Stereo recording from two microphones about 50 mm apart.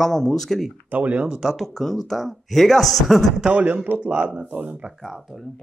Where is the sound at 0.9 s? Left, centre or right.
Right.